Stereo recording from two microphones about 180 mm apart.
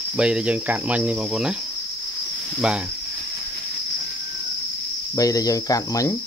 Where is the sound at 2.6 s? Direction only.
5° right (ahead or behind).